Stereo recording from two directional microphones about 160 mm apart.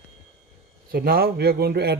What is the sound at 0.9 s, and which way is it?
Speech, 75° right (ahead or behind).